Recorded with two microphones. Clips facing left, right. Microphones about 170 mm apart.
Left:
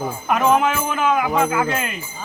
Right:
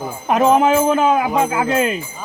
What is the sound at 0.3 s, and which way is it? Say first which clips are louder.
Speech: right 4 dB; 30° right (ahead or behind).